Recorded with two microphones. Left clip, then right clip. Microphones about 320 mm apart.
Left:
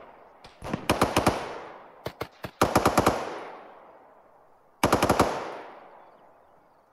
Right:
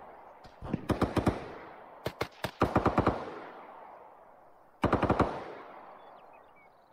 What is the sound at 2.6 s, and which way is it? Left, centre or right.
Machine gun, left.